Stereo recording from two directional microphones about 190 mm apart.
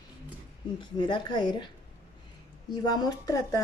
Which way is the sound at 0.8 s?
25° left (ahead or behind).